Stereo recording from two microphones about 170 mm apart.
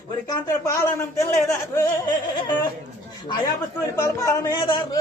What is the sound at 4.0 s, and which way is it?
A man's voice, 20° left (ahead or behind).